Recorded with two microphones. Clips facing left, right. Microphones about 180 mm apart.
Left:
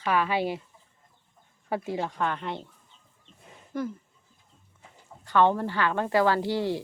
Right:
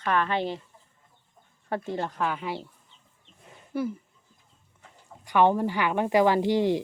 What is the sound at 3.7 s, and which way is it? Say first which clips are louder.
Speech: right 2 dB; 10° right (ahead or behind).